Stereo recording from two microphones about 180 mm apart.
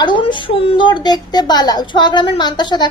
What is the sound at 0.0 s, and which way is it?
Speech, 25° left (ahead or behind).